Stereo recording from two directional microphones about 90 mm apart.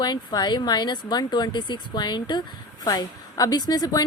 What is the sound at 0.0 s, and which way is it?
A woman's voice, 50° left (ahead or behind).